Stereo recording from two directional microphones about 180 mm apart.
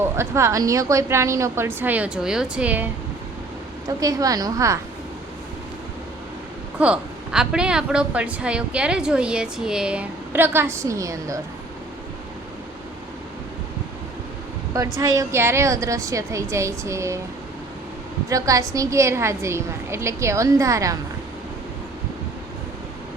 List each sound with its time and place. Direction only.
0.2 s a woman's voice: 15° right (ahead or behind)
3.8 s a woman's voice: 20° right (ahead or behind)
6.7 s a woman's voice: 5° right (ahead or behind)
14.9 s a woman's voice: 20° right (ahead or behind)
18.3 s a woman's voice: 20° right (ahead or behind)